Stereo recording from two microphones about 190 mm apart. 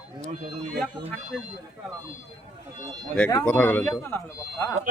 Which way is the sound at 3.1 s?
10° left (ahead or behind).